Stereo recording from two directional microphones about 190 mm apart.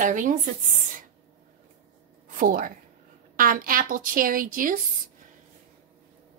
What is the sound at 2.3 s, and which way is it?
A woman's voice, 45° right (ahead or behind).